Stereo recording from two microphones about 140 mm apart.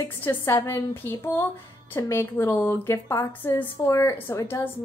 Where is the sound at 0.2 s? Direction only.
15° left (ahead or behind).